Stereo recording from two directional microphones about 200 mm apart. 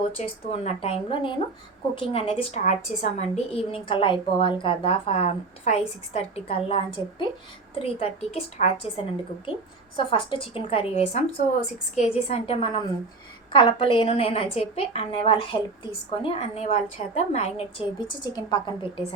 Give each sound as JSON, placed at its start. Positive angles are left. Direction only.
{"t": 0.2, "sound": "a woman's voice", "side_deg": 30}
{"t": 9.9, "sound": "a woman's voice", "side_deg": 25}